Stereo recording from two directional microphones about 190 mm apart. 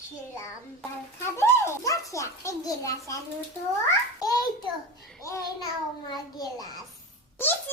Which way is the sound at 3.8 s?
20° left (ahead or behind).